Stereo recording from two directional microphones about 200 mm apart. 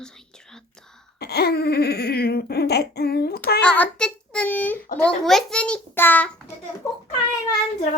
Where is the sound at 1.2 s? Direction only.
55° left (ahead or behind).